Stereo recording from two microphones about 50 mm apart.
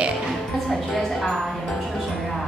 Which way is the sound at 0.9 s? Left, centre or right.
Centre.